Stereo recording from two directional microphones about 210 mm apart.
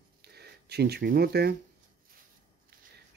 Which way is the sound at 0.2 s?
50° right (ahead or behind).